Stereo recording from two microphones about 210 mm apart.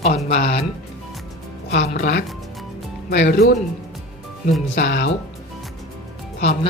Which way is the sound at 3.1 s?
45° left (ahead or behind).